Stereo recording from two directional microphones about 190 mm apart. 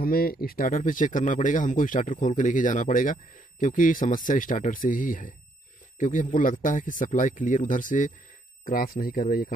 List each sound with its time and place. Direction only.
0.0 s speech: 50° left (ahead or behind)